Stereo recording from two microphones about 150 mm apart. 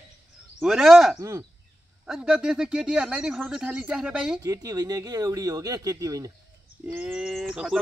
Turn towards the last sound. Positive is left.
turn(degrees=-5)  # may be behind; listen again after turning